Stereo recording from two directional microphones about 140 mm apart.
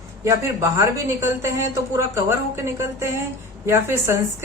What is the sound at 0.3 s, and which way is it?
Speech, 20° right (ahead or behind).